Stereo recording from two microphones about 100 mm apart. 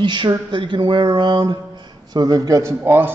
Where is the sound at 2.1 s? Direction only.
40° right (ahead or behind).